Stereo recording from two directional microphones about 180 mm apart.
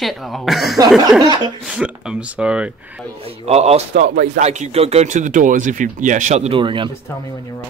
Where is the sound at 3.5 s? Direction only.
35° right (ahead or behind).